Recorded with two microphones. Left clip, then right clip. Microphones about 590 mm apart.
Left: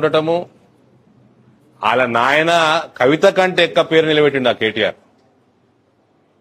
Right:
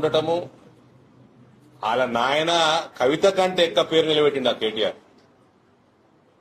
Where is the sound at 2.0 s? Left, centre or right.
Left.